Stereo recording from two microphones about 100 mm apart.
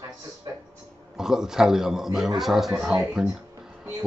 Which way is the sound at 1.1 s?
5° right (ahead or behind).